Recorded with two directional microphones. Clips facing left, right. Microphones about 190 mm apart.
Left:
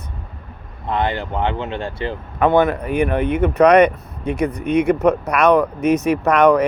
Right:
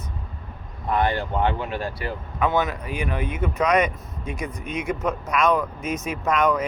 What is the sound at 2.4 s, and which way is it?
Speech, 55° left (ahead or behind).